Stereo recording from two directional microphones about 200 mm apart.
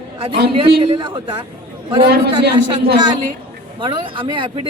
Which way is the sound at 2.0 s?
50° right (ahead or behind).